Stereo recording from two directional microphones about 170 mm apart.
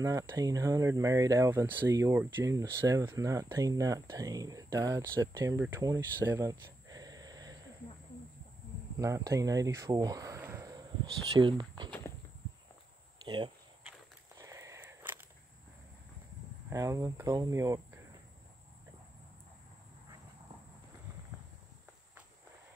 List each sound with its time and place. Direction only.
0.0 s speech: 20° right (ahead or behind)
6.2 s a sound: 15° right (ahead or behind)
9.0 s speech: 20° right (ahead or behind)
13.2 s speech: 25° right (ahead or behind)
14.4 s a sound: 20° right (ahead or behind)
16.7 s speech: 20° right (ahead or behind)